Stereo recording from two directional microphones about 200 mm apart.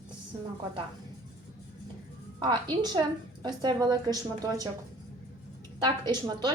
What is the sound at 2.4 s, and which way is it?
A woman's voice, 20° right (ahead or behind).